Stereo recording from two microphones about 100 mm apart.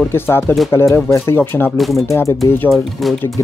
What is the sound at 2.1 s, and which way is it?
Speech, 30° left (ahead or behind).